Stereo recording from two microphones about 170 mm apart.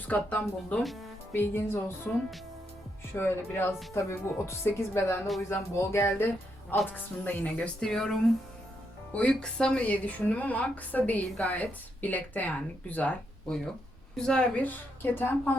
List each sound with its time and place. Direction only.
0.1 s speech: 5° left (ahead or behind)
1.3 s a woman's voice: 15° left (ahead or behind)
3.1 s a woman's voice: 15° left (ahead or behind)